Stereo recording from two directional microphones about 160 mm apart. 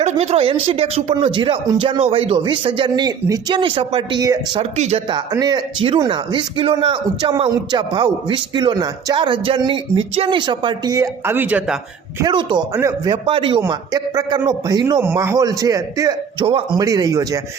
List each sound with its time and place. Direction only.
0.0 s speech: 40° right (ahead or behind); by 4.6 s 25° right (ahead or behind)
4.8 s speech: 40° right (ahead or behind); by 11.8 s 10° right (ahead or behind)
12.2 s speech: 30° right (ahead or behind)
13.2 s speech: 35° right (ahead or behind)
16.5 s speech: 35° right (ahead or behind)
16.8 s speech: 20° right (ahead or behind)